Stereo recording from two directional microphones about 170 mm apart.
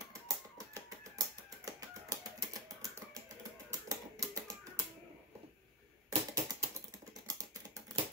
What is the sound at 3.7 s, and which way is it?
Typewriter, 20° right (ahead or behind).